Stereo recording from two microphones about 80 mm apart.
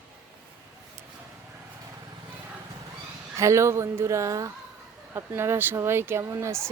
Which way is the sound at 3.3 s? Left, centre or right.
Right.